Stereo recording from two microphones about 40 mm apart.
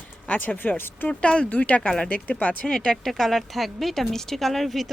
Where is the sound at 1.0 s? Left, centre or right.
Left.